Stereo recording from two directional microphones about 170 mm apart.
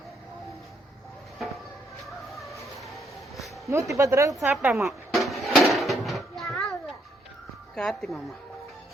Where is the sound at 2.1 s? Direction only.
Centre (ahead or behind).